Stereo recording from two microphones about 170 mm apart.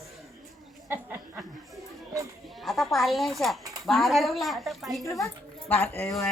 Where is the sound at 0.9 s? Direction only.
10° right (ahead or behind).